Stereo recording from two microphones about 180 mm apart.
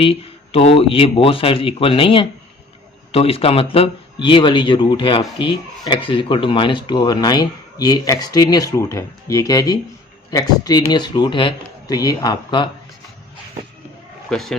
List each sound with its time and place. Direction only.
0.0 s speech: 30° left (ahead or behind)
14.3 s speech: centre (ahead or behind)